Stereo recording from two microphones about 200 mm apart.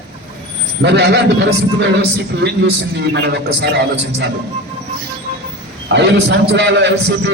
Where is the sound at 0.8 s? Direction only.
55° right (ahead or behind).